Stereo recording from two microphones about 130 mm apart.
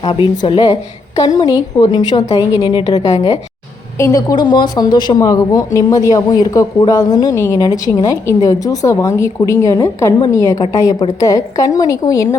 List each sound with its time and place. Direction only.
0.0 s a woman's voice: 40° left (ahead or behind)
0.7 s a woman's voice: 30° left (ahead or behind)
3.9 s speech: 25° left (ahead or behind)